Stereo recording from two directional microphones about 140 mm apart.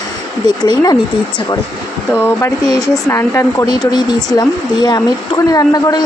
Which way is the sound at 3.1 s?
20° left (ahead or behind).